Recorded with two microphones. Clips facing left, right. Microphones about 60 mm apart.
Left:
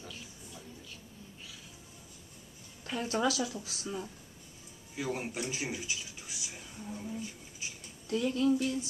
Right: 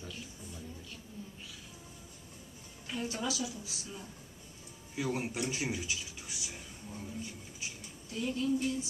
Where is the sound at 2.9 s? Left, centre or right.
Left.